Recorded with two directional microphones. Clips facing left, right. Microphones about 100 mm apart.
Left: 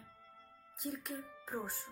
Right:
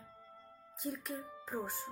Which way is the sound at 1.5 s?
Centre (ahead or behind).